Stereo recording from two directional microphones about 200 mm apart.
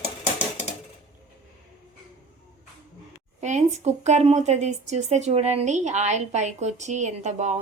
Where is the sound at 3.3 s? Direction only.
35° right (ahead or behind).